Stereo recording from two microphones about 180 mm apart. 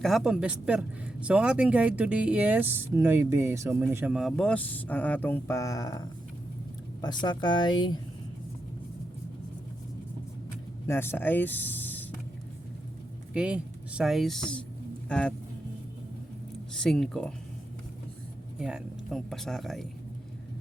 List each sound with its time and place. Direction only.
0.0 s speech: centre (ahead or behind); by 8.0 s 25° left (ahead or behind)
10.8 s speech: 15° left (ahead or behind)
13.3 s speech: 5° right (ahead or behind)
16.8 s speech: 5° left (ahead or behind)
18.6 s speech: 5° right (ahead or behind)